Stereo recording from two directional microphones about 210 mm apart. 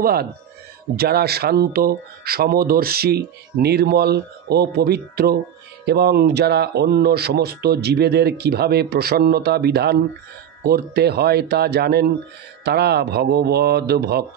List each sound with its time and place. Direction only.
0.0 s speech: 45° right (ahead or behind)